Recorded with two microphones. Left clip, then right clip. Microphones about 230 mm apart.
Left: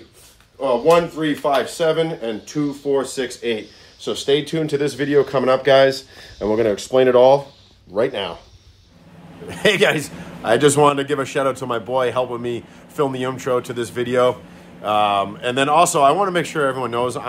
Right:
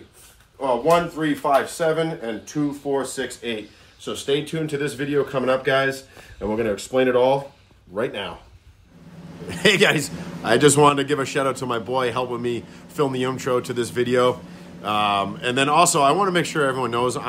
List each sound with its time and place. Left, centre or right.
0.6 s a man's voice: centre
4.3 s speech: left
9.5 s a man's voice: centre